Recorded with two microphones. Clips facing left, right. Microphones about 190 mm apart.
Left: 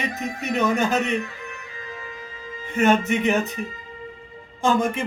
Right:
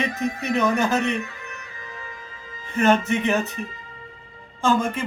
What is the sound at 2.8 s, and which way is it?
Speech, 15° left (ahead or behind).